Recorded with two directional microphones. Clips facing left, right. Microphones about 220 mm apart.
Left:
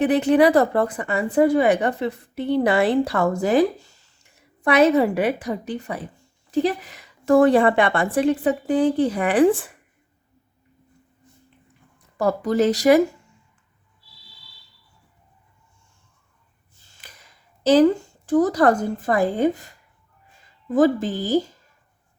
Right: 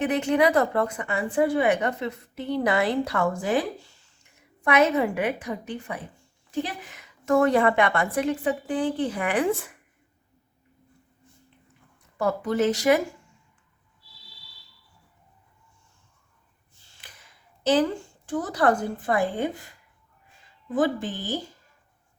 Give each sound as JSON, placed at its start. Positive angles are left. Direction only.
{"t": 0.0, "sound": "a woman's voice", "side_deg": 35}
{"t": 12.1, "sound": "a woman's voice", "side_deg": 35}
{"t": 17.0, "sound": "speech", "side_deg": 40}
{"t": 20.7, "sound": "a woman's voice", "side_deg": 40}